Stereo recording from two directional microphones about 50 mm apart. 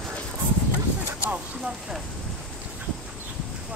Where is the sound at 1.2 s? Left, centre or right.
Right.